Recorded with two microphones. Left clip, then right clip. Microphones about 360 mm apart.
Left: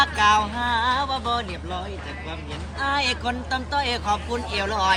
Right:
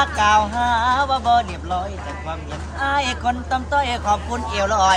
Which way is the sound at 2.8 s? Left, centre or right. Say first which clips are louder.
Right 3 dB; centre.